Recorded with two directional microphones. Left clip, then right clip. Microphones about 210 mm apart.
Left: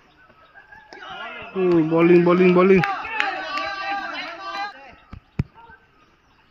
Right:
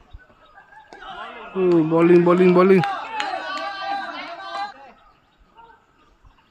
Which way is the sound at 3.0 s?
40° right (ahead or behind).